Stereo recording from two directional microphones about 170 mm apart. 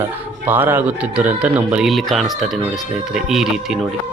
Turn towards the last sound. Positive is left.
turn(degrees=0)  # may be behind; listen again after turning